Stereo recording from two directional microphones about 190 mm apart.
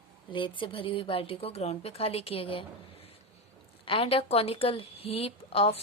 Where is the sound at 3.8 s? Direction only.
30° left (ahead or behind).